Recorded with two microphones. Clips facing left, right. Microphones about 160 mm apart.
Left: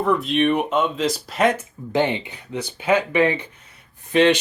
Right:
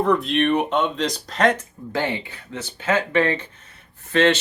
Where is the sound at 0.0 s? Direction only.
Centre (ahead or behind).